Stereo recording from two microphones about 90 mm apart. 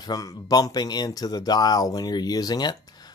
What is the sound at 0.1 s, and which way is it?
Speech, 45° left (ahead or behind).